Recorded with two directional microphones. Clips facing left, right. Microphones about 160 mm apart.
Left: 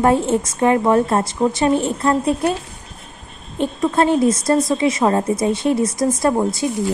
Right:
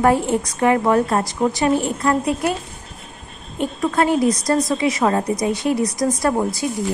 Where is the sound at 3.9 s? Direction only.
25° left (ahead or behind).